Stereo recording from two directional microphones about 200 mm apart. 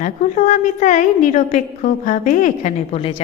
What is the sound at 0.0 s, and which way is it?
A woman's voice, 40° left (ahead or behind).